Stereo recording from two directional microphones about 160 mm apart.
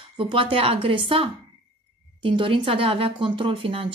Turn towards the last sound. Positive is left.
turn(degrees=-35)  # may be behind; listen again after turning